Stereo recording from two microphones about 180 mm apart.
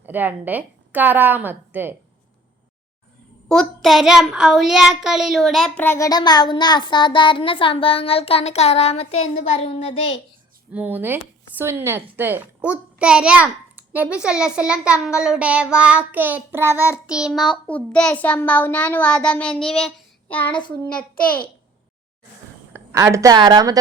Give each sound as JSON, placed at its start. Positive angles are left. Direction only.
{"t": 0.0, "sound": "a child's voice", "side_deg": -10}
{"t": 3.5, "sound": "a child's voice", "side_deg": 0}
{"t": 10.7, "sound": "a child's voice", "side_deg": -10}
{"t": 17.1, "sound": "child singing", "side_deg": -5}
{"t": 20.5, "sound": "a child's voice", "side_deg": 25}
{"t": 22.7, "sound": "a woman's voice", "side_deg": -15}